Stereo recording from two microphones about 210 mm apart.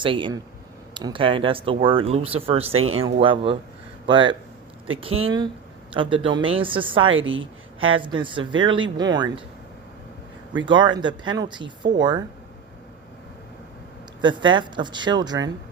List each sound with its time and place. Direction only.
0.0 s speech: 25° right (ahead or behind)
2.7 s speech: 80° right
3.0 s speech: 25° right (ahead or behind)
7.1 s a woman's voice: 65° right (ahead or behind)
7.8 s speech: 25° right (ahead or behind)
10.7 s speech: 20° right (ahead or behind)
14.2 s speech: 20° right (ahead or behind)